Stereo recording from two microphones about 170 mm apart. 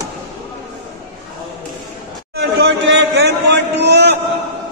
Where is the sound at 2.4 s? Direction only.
80° right.